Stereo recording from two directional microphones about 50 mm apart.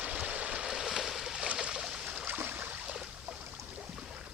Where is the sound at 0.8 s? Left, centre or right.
Centre.